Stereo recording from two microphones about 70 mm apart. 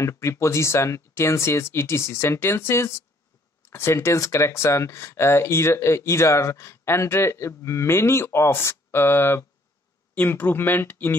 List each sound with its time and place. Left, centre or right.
0.0 s speech: left